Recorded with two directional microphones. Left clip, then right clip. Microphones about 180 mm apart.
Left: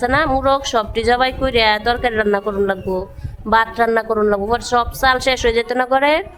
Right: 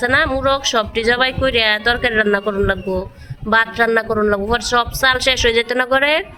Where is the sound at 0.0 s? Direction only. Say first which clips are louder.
Even; 15° left (ahead or behind).